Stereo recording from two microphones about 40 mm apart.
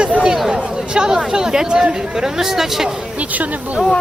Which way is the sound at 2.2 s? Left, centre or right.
Centre.